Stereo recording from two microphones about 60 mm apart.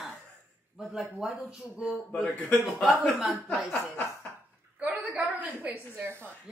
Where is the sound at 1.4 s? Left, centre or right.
Centre.